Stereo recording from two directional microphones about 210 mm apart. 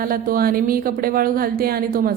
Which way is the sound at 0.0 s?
45° right (ahead or behind).